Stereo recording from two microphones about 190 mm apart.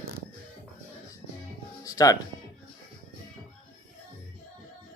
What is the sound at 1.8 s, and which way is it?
Music, 20° left (ahead or behind).